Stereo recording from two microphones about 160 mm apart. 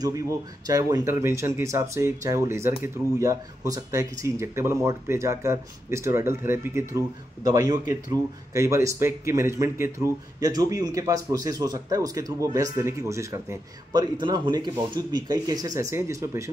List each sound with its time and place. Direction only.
0.0 s speech: 20° right (ahead or behind)